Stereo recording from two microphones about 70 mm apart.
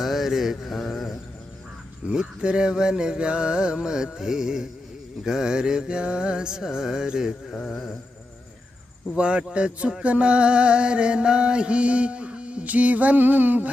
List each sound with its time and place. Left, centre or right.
0.0 s mantra: centre
2.0 s music: centre
7.5 s mantra: centre
9.1 s music: centre